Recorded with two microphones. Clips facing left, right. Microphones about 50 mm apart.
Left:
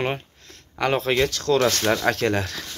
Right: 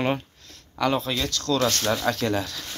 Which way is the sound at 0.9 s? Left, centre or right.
Left.